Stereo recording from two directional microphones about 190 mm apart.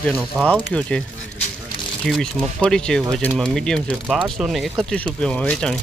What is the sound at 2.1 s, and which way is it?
Speech, centre (ahead or behind).